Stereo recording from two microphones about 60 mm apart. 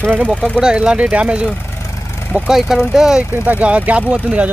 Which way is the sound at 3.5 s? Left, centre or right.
Right.